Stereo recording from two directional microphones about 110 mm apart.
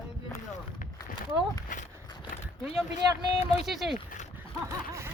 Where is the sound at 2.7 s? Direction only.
65° left (ahead or behind).